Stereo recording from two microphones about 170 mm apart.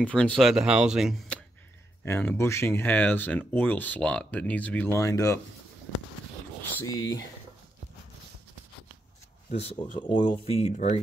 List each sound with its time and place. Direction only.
0.0 s speech: 5° left (ahead or behind)
2.0 s speech: 15° left (ahead or behind)
6.8 s speech: 20° left (ahead or behind)
9.5 s speech: 35° left (ahead or behind)